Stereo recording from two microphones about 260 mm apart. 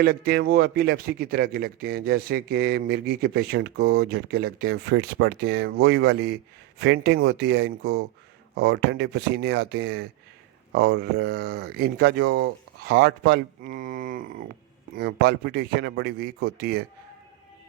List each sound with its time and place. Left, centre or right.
0.0 s a man's voice: right